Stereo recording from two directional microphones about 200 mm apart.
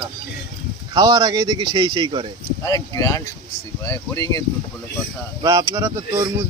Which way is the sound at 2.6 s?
15° left (ahead or behind).